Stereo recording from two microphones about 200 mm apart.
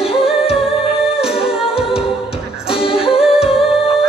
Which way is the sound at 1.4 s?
5° right (ahead or behind).